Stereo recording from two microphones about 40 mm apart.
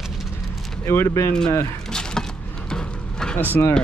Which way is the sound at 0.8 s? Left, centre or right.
Left.